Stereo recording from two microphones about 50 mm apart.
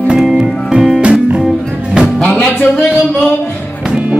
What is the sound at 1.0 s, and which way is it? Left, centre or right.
Music, right.